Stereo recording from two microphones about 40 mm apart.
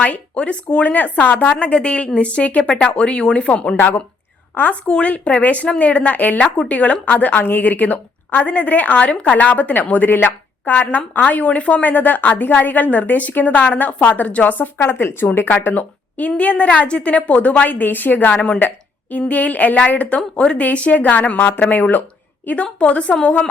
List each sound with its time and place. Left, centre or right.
0.3 s a woman's voice: left
4.9 s speech: left
5.4 s a woman's voice: left
6.4 s a woman's voice: left
7.1 s a woman's voice: left
14.8 s speech: left
15.5 s speech: left
16.1 s a woman's voice: left
20.6 s a woman's voice: left
22.9 s a woman's voice: left